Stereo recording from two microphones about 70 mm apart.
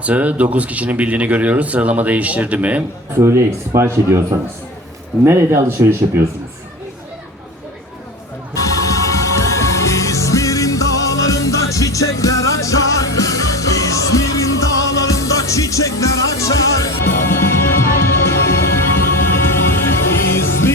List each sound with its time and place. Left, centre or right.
0.0 s speech: right
3.2 s speech: right
8.5 s music: left
17.0 s music: left